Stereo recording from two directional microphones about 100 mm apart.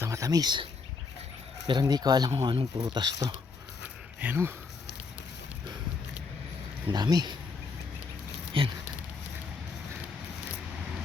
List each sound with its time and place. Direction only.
0.0 s speech: 35° right (ahead or behind)
4.2 s speech: 15° right (ahead or behind)
6.9 s speech: 45° right (ahead or behind)
8.6 s speech: 65° right (ahead or behind)